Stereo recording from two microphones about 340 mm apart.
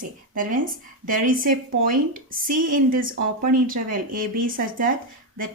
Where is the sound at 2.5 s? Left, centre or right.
Right.